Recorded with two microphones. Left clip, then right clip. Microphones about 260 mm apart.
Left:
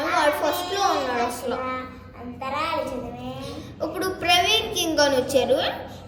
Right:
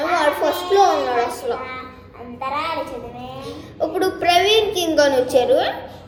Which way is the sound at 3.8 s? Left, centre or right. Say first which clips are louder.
Right 7 dB; centre.